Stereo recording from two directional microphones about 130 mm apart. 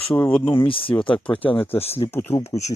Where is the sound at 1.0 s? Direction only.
10° left (ahead or behind).